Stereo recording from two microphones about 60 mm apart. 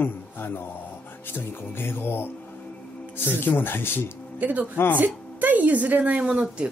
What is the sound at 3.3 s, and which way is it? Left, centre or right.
Speech, left.